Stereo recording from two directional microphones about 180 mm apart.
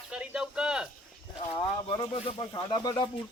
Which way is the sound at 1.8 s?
30° left (ahead or behind).